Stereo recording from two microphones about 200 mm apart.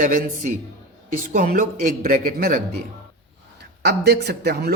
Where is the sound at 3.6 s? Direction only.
55° right (ahead or behind).